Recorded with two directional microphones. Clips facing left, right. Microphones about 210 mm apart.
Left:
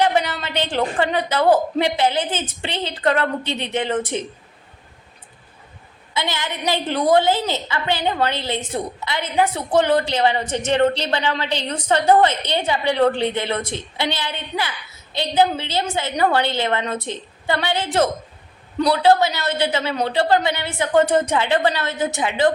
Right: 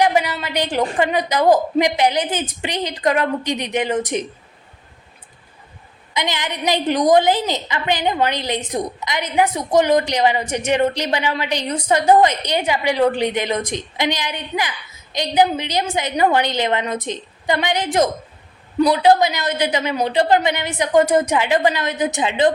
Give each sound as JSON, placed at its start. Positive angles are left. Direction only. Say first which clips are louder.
{"t": 0.0, "sound": "a woman's voice", "louder": "right 2 dB", "side_deg": -10}
{"t": 6.1, "sound": "a woman's voice", "louder": "right 2 dB", "side_deg": -15}